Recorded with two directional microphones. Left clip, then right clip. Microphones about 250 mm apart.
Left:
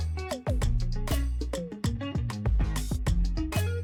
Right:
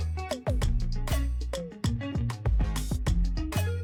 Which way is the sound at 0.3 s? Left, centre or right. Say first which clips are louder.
Right 1 dB; centre.